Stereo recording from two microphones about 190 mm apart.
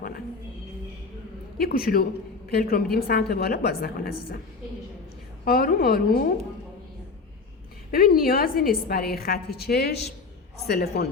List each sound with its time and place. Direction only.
1.5 s a woman's voice: 50° left (ahead or behind)
5.5 s a woman's voice: 50° left (ahead or behind)
7.9 s a woman's voice: 50° left (ahead or behind)